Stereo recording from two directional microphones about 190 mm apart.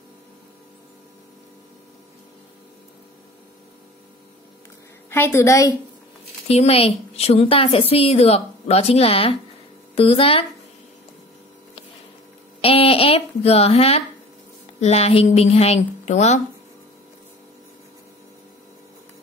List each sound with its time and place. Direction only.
5.1 s a woman's voice: 15° left (ahead or behind)
6.4 s a woman's voice: 35° left (ahead or behind)
12.6 s a woman's voice: 30° left (ahead or behind)